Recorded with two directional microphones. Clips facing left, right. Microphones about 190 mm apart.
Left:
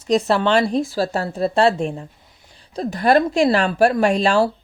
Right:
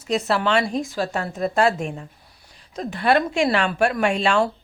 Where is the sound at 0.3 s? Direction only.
30° left (ahead or behind).